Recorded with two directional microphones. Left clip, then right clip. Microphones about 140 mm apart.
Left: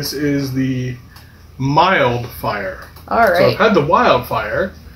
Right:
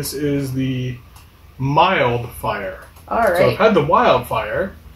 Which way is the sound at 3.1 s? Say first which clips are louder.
Left 3 dB; 20° left (ahead or behind).